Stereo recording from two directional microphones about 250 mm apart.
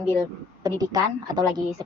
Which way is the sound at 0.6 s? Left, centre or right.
Centre.